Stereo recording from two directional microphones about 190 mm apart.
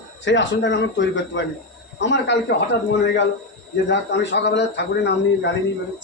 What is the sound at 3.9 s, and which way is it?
Speech, 65° left (ahead or behind).